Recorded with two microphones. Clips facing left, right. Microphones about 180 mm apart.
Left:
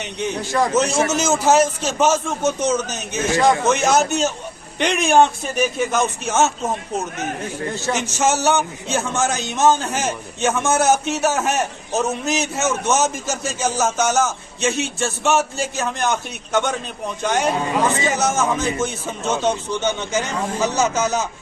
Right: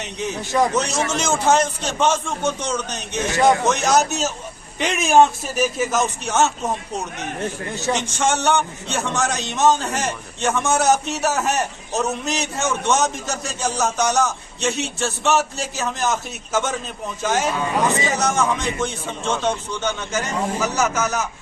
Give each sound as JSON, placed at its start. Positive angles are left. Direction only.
{"t": 0.0, "sound": "a man's voice", "side_deg": 0}
{"t": 1.1, "sound": "speech", "side_deg": 5}
{"t": 7.9, "sound": "speech", "side_deg": 5}
{"t": 19.8, "sound": "a man's voice", "side_deg": 25}